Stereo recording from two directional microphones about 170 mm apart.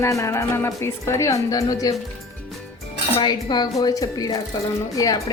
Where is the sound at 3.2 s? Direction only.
25° left (ahead or behind).